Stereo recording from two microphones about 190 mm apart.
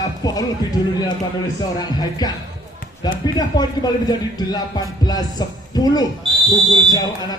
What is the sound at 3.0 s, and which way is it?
Speech, 20° left (ahead or behind).